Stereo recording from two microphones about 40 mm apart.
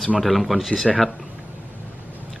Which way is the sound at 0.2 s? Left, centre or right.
Centre.